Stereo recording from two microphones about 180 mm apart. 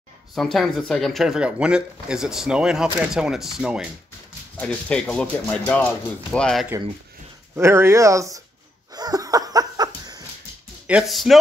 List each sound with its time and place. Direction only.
0.3 s speech: centre (ahead or behind)
7.5 s speech: 15° right (ahead or behind)
8.9 s a sound: 20° right (ahead or behind)
10.9 s speech: centre (ahead or behind)